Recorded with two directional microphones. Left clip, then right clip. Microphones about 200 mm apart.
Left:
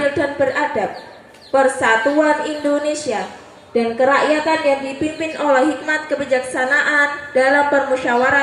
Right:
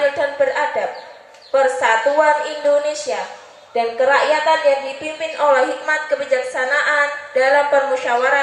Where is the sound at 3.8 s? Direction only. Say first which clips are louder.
Even; 15° left (ahead or behind).